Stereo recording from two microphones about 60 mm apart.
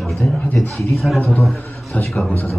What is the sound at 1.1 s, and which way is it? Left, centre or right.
Speech, left.